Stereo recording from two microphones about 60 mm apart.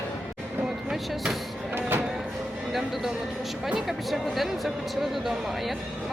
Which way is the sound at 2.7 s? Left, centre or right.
Centre.